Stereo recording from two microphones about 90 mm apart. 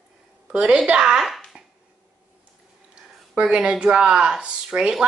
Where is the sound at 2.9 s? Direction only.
10° right (ahead or behind).